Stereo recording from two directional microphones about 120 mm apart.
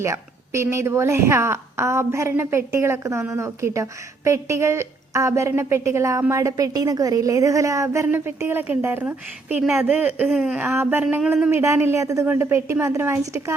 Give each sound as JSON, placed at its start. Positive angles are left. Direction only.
{"t": 0.0, "sound": "a woman's voice", "side_deg": -25}
{"t": 10.2, "sound": "a woman's voice", "side_deg": -5}